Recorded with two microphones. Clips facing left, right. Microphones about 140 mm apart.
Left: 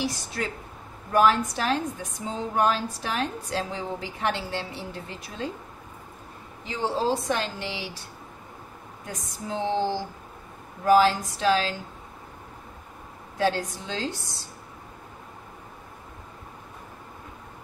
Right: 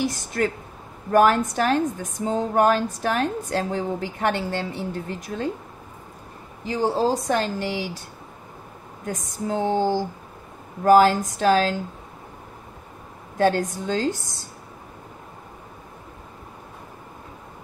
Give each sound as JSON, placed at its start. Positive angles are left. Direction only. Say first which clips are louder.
{"t": 0.0, "sound": "a woman's voice", "louder": "right 6 dB", "side_deg": -50}
{"t": 6.6, "sound": "a woman's voice", "louder": "right 5 dB", "side_deg": -40}
{"t": 9.0, "sound": "a woman's voice", "louder": "right 8 dB", "side_deg": -45}
{"t": 13.4, "sound": "a woman's voice", "louder": "right 5 dB", "side_deg": -50}